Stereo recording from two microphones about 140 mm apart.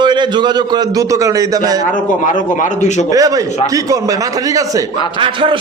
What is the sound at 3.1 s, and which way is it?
A man's voice, 25° right (ahead or behind).